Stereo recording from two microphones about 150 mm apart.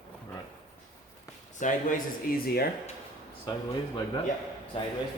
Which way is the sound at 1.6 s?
55° left (ahead or behind).